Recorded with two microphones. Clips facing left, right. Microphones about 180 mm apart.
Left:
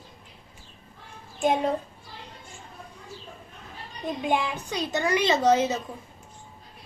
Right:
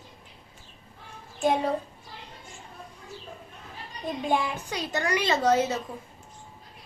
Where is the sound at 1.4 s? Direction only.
20° left (ahead or behind).